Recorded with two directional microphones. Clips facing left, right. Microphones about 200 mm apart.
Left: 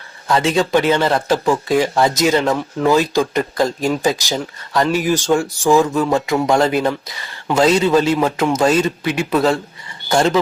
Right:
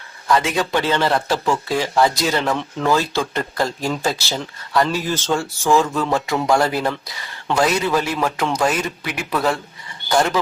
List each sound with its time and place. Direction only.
0.4 s a man's voice: 20° left (ahead or behind)